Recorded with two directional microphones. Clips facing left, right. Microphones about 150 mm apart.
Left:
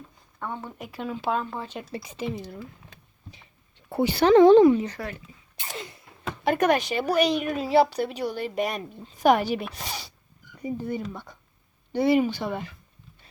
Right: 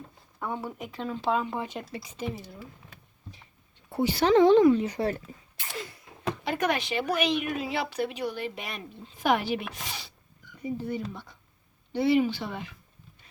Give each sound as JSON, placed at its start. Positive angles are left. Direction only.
{"t": 0.3, "sound": "speech", "side_deg": -10}
{"t": 0.8, "sound": "speech", "side_deg": 10}
{"t": 1.5, "sound": "speech", "side_deg": -15}
{"t": 2.0, "sound": "speech", "side_deg": 65}
{"t": 3.8, "sound": "speech", "side_deg": 60}
{"t": 5.0, "sound": "speech", "side_deg": -25}
{"t": 5.7, "sound": "a sound", "side_deg": 20}
{"t": 6.4, "sound": "speech", "side_deg": 50}